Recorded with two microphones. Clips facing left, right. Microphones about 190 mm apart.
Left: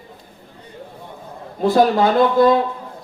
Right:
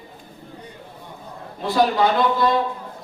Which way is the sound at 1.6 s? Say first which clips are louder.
Left 4 dB; 50° left (ahead or behind).